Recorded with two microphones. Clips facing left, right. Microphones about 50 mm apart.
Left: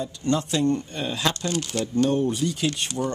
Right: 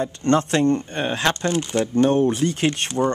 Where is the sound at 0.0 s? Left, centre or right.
Right.